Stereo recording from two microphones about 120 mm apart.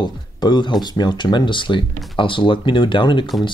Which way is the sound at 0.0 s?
40° left (ahead or behind).